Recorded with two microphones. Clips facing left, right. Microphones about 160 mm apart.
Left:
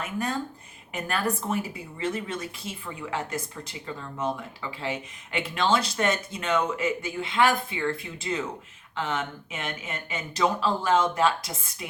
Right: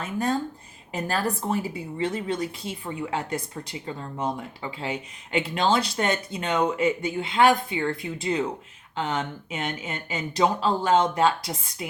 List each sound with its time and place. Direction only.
0.0 s speech: 30° right (ahead or behind)